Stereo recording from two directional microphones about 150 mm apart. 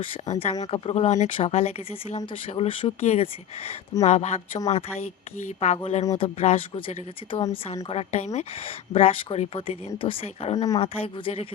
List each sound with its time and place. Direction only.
0.0 s speech: 35° left (ahead or behind)